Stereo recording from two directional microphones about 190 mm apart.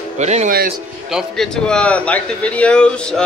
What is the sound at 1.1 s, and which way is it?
A man's voice, centre (ahead or behind).